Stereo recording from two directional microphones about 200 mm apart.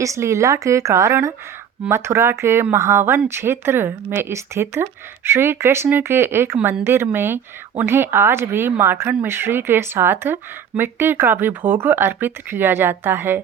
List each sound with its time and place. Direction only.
0.0 s speech: 15° right (ahead or behind)